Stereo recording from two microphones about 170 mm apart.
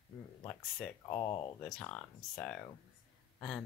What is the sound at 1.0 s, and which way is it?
Speech, 20° left (ahead or behind).